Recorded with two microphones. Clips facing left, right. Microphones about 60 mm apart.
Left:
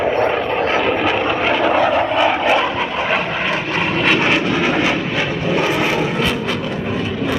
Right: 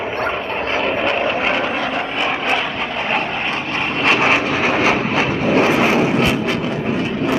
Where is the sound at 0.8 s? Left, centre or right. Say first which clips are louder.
Left 1 dB; centre.